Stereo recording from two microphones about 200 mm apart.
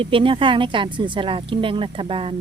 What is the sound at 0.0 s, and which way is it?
Speech, 25° right (ahead or behind).